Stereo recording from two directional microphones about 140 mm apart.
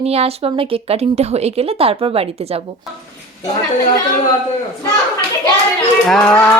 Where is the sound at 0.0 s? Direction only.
45° right (ahead or behind).